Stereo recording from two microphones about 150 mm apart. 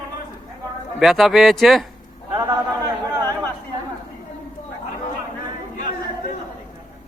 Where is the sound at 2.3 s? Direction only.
30° right (ahead or behind).